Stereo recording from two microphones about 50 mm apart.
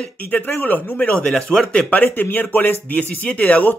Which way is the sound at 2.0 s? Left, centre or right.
Left.